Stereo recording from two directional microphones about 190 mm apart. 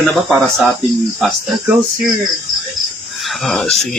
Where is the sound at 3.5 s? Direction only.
Centre (ahead or behind).